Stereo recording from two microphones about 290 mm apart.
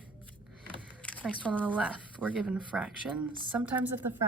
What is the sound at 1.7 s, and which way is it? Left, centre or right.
A woman's voice, centre.